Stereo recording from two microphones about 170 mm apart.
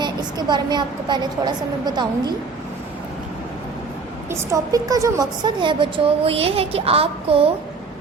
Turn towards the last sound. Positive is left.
turn(degrees=-35)  # may be behind; listen again after turning